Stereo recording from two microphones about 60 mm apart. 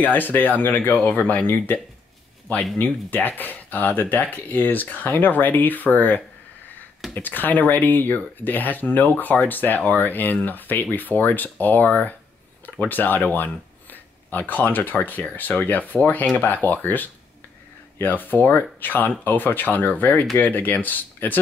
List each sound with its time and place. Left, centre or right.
0.0 s speech: left
2.8 s speech: left